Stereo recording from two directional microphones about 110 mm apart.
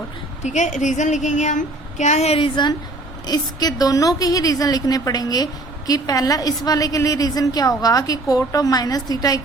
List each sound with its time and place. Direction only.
0.4 s a woman's voice: 90° left; by 2.5 s 70° left (ahead or behind)
3.2 s a woman's voice: 35° left (ahead or behind)